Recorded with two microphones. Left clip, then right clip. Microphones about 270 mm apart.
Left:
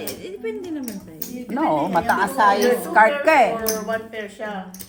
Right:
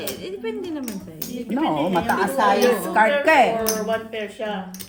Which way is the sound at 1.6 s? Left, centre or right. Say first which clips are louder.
Left 2 dB; centre.